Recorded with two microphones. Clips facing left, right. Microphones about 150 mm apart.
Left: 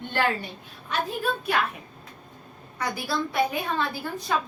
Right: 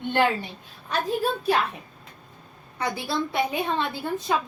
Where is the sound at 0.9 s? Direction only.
35° right (ahead or behind).